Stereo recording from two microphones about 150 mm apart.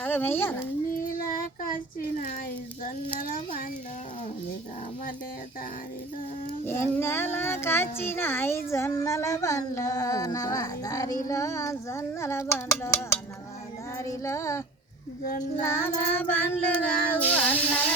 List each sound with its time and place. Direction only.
0.0 s a child's voice: 15° left (ahead or behind)
1.3 s child singing: 70° left (ahead or behind)
6.7 s a child's voice: 15° left (ahead or behind)
11.3 s a sound: 20° left (ahead or behind)
15.6 s a child's voice: 15° left (ahead or behind)